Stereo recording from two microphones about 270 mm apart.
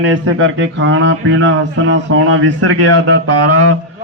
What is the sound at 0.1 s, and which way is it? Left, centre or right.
Speech, right.